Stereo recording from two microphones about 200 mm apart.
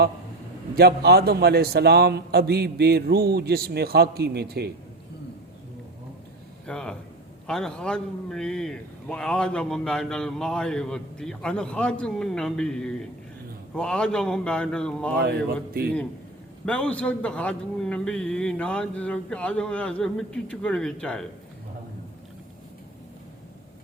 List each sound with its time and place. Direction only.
0.8 s a man's voice: 50° right (ahead or behind)
6.7 s a man's voice: 5° left (ahead or behind)
15.2 s a man's voice: 50° right (ahead or behind)
16.6 s a man's voice: 5° left (ahead or behind)